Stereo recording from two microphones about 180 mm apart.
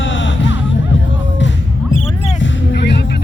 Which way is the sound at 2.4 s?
80° left.